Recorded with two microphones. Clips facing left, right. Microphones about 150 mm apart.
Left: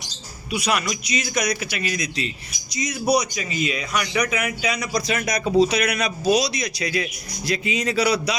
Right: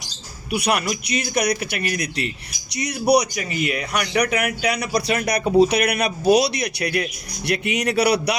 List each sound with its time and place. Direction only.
0.5 s a man's voice: 60° right (ahead or behind)
4.2 s a man's voice: 65° right (ahead or behind)